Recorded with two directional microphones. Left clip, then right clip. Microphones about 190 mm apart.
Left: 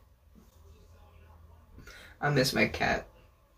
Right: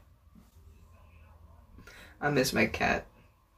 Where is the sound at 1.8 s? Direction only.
Centre (ahead or behind).